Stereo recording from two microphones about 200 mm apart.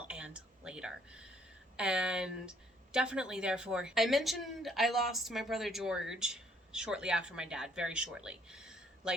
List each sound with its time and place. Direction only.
0.1 s speech: 5° right (ahead or behind)